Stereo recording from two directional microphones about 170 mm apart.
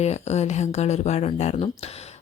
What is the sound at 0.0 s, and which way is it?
Speech, 40° left (ahead or behind).